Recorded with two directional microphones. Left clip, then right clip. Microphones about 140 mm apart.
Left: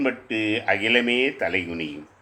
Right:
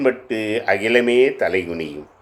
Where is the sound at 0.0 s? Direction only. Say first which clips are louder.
Right 5 dB; 35° right (ahead or behind).